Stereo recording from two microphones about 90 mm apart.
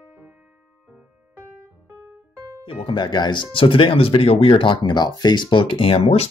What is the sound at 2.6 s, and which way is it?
Speech, 75° left (ahead or behind).